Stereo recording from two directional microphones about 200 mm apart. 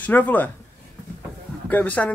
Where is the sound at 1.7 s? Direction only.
10° left (ahead or behind).